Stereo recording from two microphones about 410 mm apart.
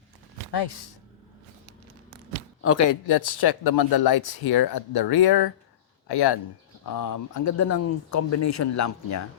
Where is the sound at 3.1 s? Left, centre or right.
Left.